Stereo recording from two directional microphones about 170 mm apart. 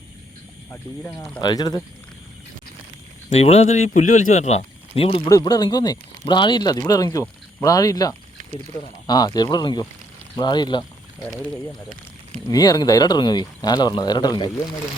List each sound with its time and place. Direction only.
1.4 s speech: 25° left (ahead or behind)
3.2 s speech: 40° left (ahead or behind)
5.3 s speech: 25° left (ahead or behind)
12.5 s speech: 20° left (ahead or behind)